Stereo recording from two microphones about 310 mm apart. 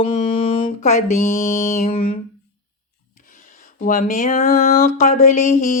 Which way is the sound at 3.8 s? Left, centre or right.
Left.